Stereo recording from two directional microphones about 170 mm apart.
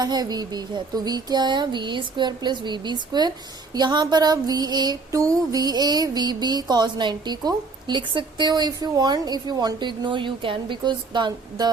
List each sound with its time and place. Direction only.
0.0 s speech: 25° right (ahead or behind)